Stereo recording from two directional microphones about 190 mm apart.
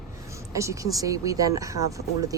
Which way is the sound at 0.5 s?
15° right (ahead or behind).